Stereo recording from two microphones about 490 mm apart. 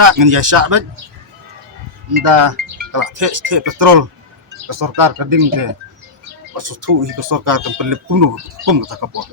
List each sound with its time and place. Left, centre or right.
0.0 s speech: right
2.2 s speech: right